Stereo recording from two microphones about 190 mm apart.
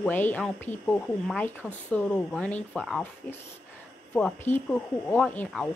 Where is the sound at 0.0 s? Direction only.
10° left (ahead or behind).